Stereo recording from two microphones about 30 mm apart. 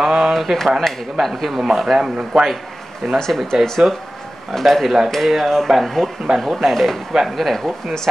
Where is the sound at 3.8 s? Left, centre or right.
Right.